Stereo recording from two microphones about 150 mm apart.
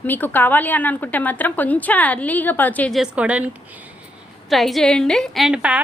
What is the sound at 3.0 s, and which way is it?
Speech, 10° right (ahead or behind).